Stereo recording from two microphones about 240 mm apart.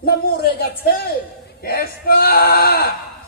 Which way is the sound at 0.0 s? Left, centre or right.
Left.